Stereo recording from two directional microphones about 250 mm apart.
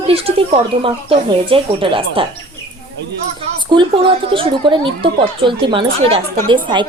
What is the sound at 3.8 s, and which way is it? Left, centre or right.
A woman's voice, right.